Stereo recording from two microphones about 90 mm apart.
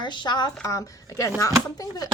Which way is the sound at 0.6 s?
40° left (ahead or behind).